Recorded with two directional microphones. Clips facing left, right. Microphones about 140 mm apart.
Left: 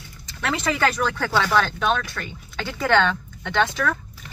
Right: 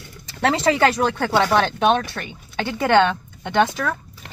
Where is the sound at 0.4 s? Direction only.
35° right (ahead or behind).